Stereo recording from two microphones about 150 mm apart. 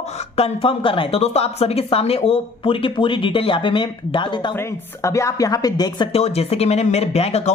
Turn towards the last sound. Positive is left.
turn(degrees=45)  # may be behind; listen again after turning